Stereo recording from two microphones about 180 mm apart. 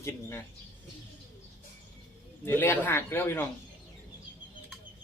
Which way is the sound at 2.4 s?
10° left (ahead or behind).